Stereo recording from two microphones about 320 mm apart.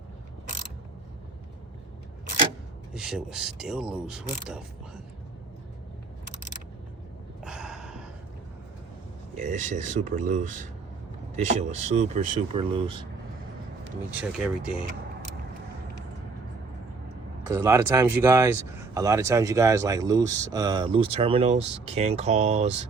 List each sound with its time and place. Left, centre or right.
2.9 s speech: centre
7.4 s gasp: centre
9.4 s speech: right
14.2 s speech: centre
17.5 s speech: centre